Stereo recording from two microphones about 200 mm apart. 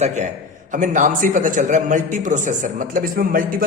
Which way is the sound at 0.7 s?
40° right (ahead or behind).